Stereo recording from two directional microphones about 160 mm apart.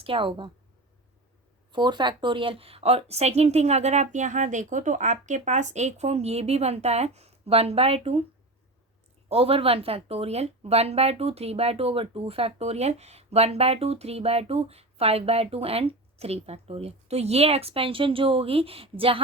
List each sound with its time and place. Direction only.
0.0 s speech: 35° right (ahead or behind)
1.7 s speech: 30° right (ahead or behind)
9.3 s speech: 35° right (ahead or behind)